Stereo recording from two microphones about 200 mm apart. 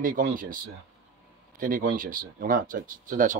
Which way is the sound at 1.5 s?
45° right (ahead or behind).